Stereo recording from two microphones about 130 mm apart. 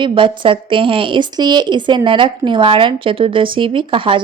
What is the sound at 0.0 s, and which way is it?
Speech, 40° right (ahead or behind).